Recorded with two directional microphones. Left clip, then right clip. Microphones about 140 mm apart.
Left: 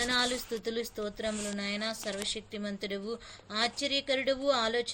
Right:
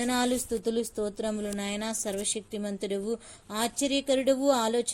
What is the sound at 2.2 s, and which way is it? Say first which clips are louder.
A woman's voice: right 3 dB; 35° right (ahead or behind).